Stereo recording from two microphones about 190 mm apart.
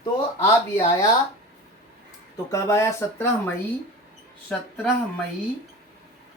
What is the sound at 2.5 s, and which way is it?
Speech, 15° left (ahead or behind).